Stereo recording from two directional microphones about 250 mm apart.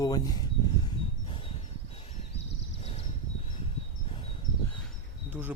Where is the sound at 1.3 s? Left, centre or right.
Left.